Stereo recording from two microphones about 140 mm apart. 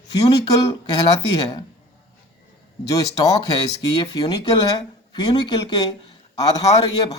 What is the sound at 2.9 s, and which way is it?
Speech, 25° left (ahead or behind).